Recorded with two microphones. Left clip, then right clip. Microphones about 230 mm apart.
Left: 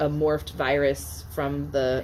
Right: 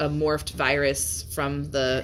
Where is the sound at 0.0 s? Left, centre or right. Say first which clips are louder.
Left 1 dB; right.